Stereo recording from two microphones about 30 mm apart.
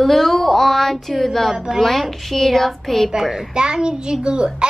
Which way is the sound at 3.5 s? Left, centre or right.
Right.